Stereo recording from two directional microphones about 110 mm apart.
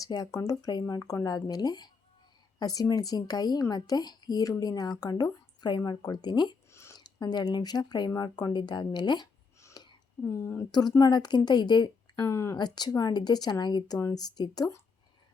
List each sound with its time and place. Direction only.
0.0 s a woman's voice: 35° left (ahead or behind)
6.7 s a sound: 25° left (ahead or behind)
7.0 s a woman's voice: 40° left (ahead or behind)
9.6 s a sound: 25° left (ahead or behind)
10.2 s a woman's voice: 20° left (ahead or behind)
10.7 s a woman's voice: 40° left (ahead or behind)
12.2 s a woman's voice: 25° left (ahead or behind)
12.5 s a woman's voice: 40° left (ahead or behind)